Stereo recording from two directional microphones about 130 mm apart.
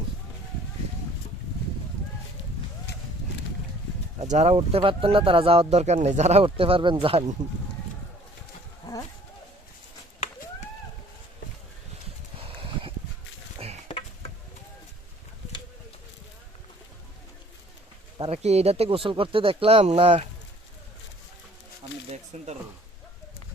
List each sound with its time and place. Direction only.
4.2 s speech: 60° right (ahead or behind)
4.5 s speech: 45° right (ahead or behind)
8.8 s insect: 30° left (ahead or behind)
12.4 s a sound: 45° right (ahead or behind)
18.3 s speech: 55° right (ahead or behind)
22.1 s speech: 60° right (ahead or behind)